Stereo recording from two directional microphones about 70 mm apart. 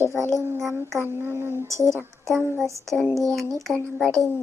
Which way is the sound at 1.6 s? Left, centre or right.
Right.